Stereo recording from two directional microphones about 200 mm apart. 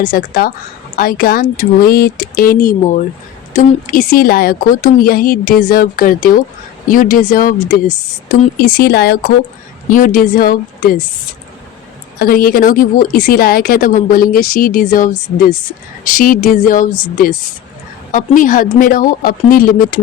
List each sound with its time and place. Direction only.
0.1 s a woman's voice: 45° left (ahead or behind)
12.2 s a woman's voice: 45° left (ahead or behind)
18.1 s a woman's voice: 40° left (ahead or behind)